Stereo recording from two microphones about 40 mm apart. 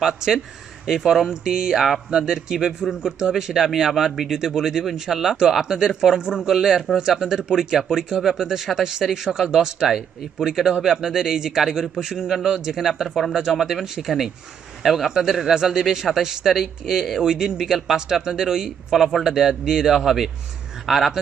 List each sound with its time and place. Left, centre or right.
0.0 s a man's voice: centre
4.4 s a man's voice: centre
12.9 s speech: centre
13.3 s a man's voice: centre
14.8 s speech: centre
15.6 s a man's voice: centre